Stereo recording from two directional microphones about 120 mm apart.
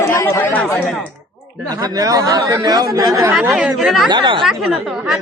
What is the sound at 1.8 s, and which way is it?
Speech, 30° right (ahead or behind).